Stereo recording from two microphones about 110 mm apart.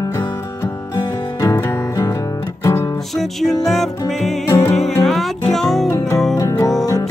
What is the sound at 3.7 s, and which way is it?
Music, centre (ahead or behind).